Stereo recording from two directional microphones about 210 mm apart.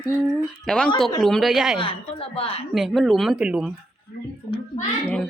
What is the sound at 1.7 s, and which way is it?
Speech, 25° left (ahead or behind).